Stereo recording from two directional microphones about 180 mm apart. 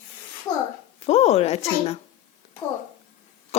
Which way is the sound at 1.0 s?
35° left (ahead or behind).